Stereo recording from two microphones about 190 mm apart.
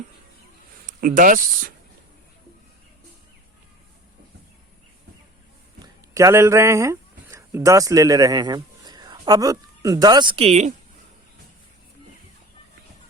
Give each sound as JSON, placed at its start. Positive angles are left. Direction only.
{"t": 0.9, "sound": "speech", "side_deg": -45}
{"t": 6.1, "sound": "speech", "side_deg": -15}